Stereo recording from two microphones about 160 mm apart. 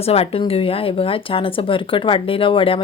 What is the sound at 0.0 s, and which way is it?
A woman's voice, 40° left (ahead or behind).